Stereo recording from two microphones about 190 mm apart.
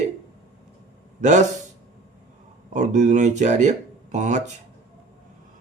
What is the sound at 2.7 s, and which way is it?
Speech, 40° right (ahead or behind).